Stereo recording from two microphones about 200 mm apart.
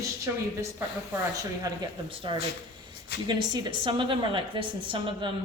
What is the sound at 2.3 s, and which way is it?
A woman's voice, 25° right (ahead or behind).